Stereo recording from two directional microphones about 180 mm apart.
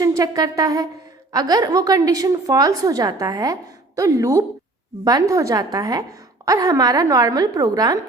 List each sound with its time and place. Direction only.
0.0 s a woman's voice: 20° right (ahead or behind)